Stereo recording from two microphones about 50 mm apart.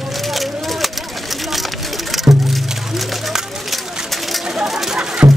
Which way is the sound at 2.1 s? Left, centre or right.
Centre.